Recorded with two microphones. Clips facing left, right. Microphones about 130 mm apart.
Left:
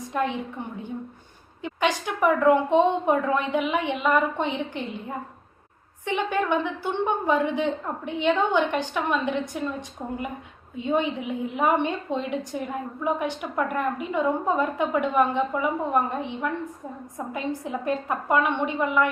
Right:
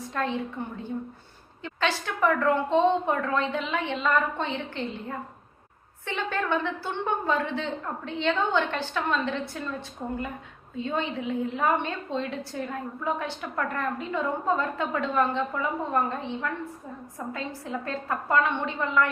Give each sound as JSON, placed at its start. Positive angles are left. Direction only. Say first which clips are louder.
{"t": 0.0, "sound": "a woman's voice", "louder": "left 2 dB", "side_deg": 15}